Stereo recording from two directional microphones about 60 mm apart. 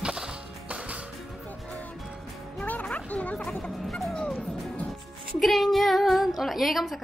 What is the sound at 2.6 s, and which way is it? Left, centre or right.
Music, left.